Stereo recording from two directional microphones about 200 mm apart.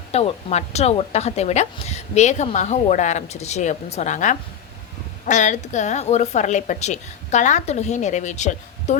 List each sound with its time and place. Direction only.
0.1 s a woman's voice: 30° left (ahead or behind)